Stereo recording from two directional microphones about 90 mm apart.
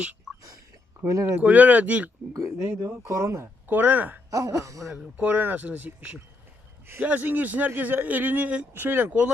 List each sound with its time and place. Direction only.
1.0 s speech: 35° right (ahead or behind)
1.4 s speech: 15° right (ahead or behind)
2.3 s speech: 40° right (ahead or behind)
3.7 s speech: 20° right (ahead or behind)
4.3 s speech: 40° right (ahead or behind)
5.1 s speech: 15° right (ahead or behind)